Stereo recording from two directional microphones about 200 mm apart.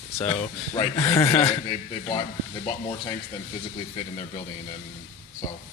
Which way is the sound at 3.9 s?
35° left (ahead or behind).